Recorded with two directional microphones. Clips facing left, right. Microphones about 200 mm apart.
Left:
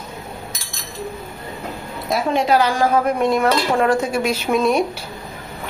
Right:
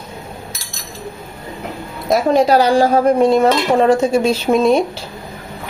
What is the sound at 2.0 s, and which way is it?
A woman's voice, 40° right (ahead or behind).